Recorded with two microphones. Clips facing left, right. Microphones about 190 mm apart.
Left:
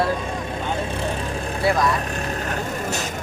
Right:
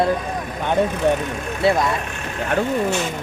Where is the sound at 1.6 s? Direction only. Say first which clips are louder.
Right 3 dB; 25° right (ahead or behind).